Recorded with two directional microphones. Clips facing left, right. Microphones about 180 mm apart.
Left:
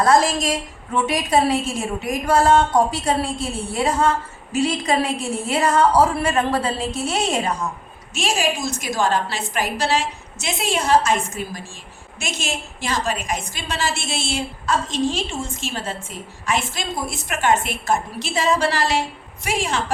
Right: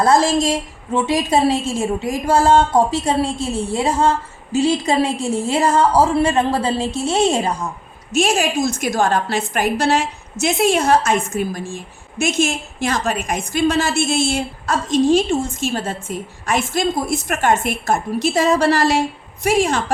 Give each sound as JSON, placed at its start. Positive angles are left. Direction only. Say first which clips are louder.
{"t": 0.0, "sound": "a woman's voice", "louder": "right 2 dB", "side_deg": -30}
{"t": 8.1, "sound": "a woman's voice", "louder": "right 5 dB", "side_deg": -45}